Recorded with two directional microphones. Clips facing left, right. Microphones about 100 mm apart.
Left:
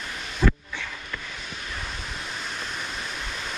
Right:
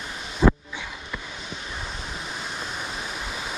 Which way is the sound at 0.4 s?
25° right (ahead or behind).